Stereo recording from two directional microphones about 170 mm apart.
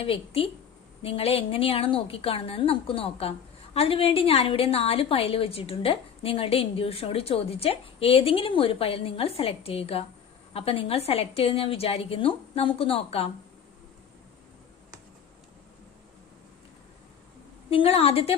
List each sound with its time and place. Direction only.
0.0 s a woman's voice: 35° left (ahead or behind)
17.7 s a woman's voice: 35° left (ahead or behind)